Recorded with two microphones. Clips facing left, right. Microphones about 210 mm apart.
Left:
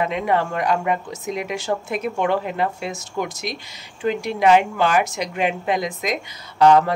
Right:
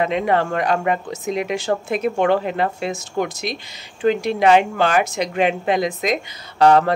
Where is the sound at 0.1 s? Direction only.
30° right (ahead or behind).